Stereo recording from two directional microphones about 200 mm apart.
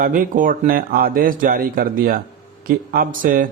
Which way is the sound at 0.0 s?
45° right (ahead or behind).